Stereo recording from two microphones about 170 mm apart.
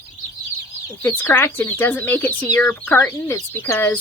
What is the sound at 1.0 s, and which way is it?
Speech, 10° left (ahead or behind).